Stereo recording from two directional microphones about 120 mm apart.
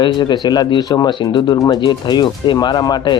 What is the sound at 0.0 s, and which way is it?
Speech, 40° left (ahead or behind).